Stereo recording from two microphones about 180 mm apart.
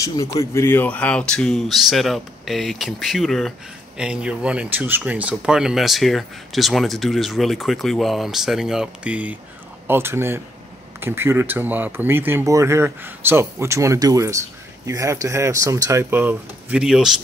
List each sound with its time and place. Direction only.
0.0 s speech: 20° left (ahead or behind); by 17.1 s 5° right (ahead or behind)